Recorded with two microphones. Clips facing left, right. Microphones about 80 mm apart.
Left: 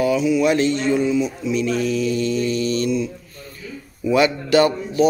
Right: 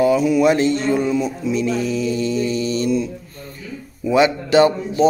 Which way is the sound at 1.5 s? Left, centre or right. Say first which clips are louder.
Even; right.